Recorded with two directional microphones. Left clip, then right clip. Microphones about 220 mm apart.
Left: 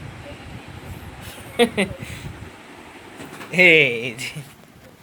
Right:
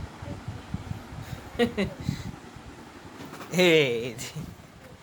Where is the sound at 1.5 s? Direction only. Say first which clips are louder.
Left 8 dB; 15° left (ahead or behind).